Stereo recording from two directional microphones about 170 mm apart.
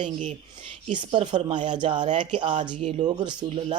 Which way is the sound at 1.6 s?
25° right (ahead or behind).